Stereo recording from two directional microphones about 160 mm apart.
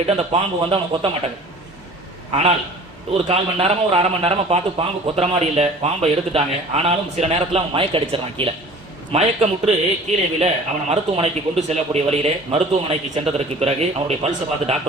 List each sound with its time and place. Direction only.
0.1 s a man's voice: 40° right (ahead or behind)
3.1 s a man's voice: 40° right (ahead or behind)